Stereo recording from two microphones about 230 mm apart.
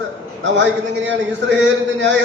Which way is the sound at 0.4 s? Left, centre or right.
Right.